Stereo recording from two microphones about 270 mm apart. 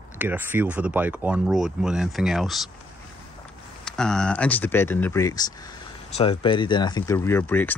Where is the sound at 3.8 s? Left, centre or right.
Centre.